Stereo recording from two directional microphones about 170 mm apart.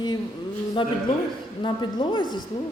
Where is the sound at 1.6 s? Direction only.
30° left (ahead or behind).